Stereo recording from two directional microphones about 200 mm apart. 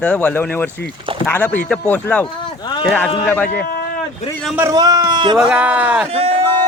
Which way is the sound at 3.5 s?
50° left (ahead or behind).